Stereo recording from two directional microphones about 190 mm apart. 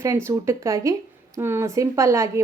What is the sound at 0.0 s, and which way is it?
Speech, 15° right (ahead or behind).